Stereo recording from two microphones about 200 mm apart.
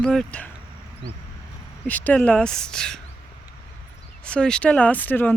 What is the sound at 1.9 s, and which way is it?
Speech, 10° left (ahead or behind).